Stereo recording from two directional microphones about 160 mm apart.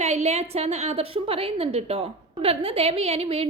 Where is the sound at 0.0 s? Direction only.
45° right (ahead or behind).